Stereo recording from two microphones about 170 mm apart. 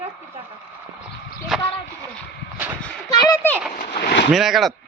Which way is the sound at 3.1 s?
20° left (ahead or behind).